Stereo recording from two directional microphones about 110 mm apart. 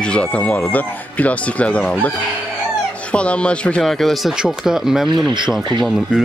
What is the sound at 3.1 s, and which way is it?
Speech, 10° left (ahead or behind).